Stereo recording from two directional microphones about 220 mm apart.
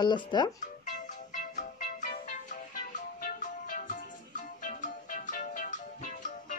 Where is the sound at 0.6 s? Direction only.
35° left (ahead or behind).